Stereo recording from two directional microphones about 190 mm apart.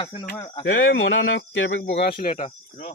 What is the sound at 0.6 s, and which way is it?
Speech, 90° left.